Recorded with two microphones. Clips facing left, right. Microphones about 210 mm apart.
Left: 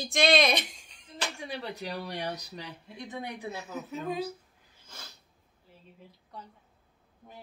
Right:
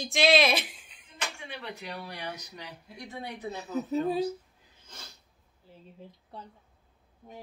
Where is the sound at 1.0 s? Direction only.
35° left (ahead or behind); by 3.3 s 15° left (ahead or behind).